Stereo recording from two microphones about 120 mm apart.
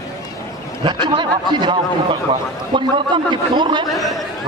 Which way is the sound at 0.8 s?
40° right (ahead or behind).